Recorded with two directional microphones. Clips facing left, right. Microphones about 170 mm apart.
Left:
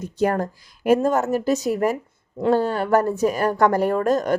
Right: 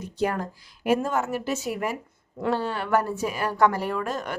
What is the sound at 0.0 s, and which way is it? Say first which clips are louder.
A woman's voice: left 5 dB; 45° left (ahead or behind).